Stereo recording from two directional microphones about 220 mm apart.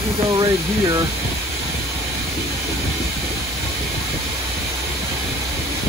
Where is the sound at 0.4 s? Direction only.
15° right (ahead or behind).